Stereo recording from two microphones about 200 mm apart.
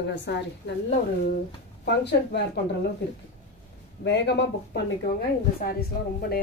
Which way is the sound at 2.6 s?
60° left (ahead or behind).